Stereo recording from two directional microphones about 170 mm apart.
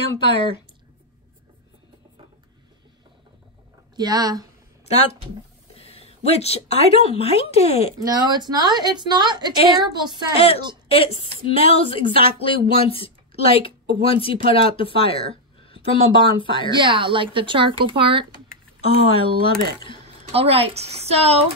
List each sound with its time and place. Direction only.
3.9 s speech: 25° right (ahead or behind)
5.8 s speech: 35° left (ahead or behind)
8.0 s a woman's voice: 25° right (ahead or behind)
10.3 s speech: 35° left (ahead or behind)
16.7 s a woman's voice: 30° right (ahead or behind)
18.9 s speech: 35° left (ahead or behind)
20.3 s speech: 35° right (ahead or behind)